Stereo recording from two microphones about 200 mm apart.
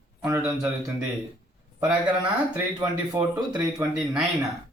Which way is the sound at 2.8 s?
20° right (ahead or behind).